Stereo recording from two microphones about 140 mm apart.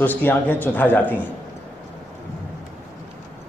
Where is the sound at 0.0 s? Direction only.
15° left (ahead or behind).